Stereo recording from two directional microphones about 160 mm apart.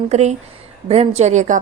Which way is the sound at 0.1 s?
45° right (ahead or behind).